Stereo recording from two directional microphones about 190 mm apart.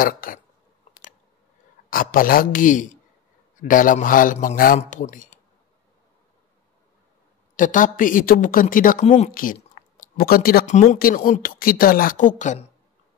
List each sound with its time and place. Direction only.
0.0 s speech: 45° left (ahead or behind)
1.9 s speech: 45° left (ahead or behind)
7.5 s speech: 45° left (ahead or behind)